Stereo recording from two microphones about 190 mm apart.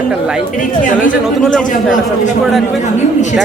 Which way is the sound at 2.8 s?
40° left (ahead or behind).